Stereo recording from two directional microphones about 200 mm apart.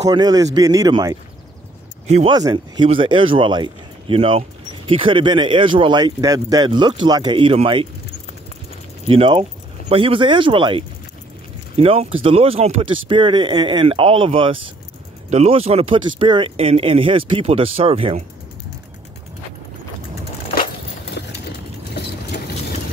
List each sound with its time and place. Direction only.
0.0 s speech: 20° right (ahead or behind)
2.0 s speech: 35° right (ahead or behind)
2.3 s speech: 20° right (ahead or behind)
9.0 s speech: 30° right (ahead or behind)
21.9 s vehicle: 55° left (ahead or behind)